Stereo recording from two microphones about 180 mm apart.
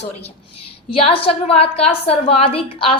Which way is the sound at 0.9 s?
30° left (ahead or behind).